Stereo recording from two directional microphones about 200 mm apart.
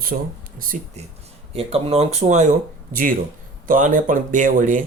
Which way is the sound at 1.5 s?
30° right (ahead or behind).